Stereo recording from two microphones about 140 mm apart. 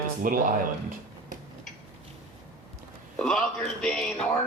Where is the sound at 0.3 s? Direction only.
75° right (ahead or behind).